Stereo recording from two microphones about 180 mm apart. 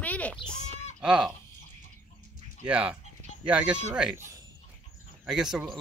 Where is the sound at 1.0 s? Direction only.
5° right (ahead or behind).